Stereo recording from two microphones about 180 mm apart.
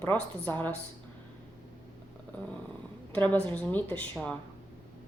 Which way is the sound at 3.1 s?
10° left (ahead or behind).